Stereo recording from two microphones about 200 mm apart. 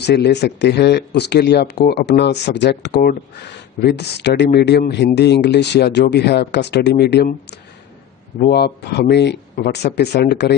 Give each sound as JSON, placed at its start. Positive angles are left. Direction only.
{"t": 0.0, "sound": "speech", "side_deg": 55}